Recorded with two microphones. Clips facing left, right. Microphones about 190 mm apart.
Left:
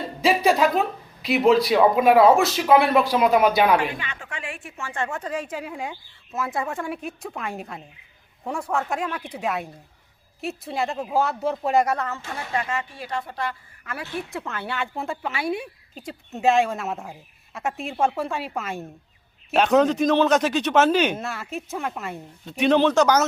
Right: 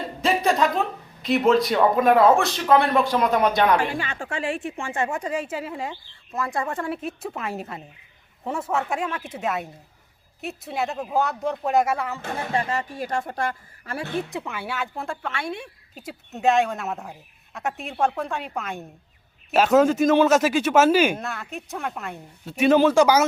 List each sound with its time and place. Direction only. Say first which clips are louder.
0.2 s music: left 2 dB; centre (ahead or behind)
1.2 s a woman's voice: left 1 dB; centre (ahead or behind)
3.9 s a woman's voice: right 6 dB; 40° right (ahead or behind); by 12.2 s 10° right (ahead or behind)
12.5 s speech: right 1 dB; 35° right (ahead or behind)
13.9 s a woman's voice: right 3 dB; 35° right (ahead or behind)
14.3 s a woman's voice: even; 10° right (ahead or behind)